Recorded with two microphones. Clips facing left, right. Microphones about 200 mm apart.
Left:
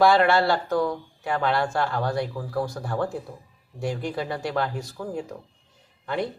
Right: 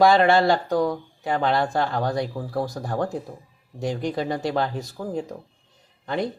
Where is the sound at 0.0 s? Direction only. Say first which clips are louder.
Right 2 dB; 15° right (ahead or behind); by 2.9 s 30° right (ahead or behind).